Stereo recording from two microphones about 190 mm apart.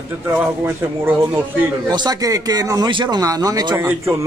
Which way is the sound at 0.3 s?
10° right (ahead or behind).